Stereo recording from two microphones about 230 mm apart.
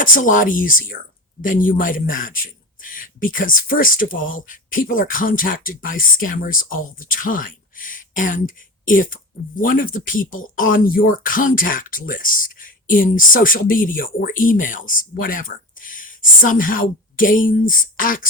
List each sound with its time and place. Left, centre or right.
0.0 s speech: left